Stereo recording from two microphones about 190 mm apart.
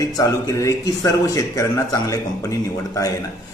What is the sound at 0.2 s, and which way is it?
A man's voice, 20° left (ahead or behind).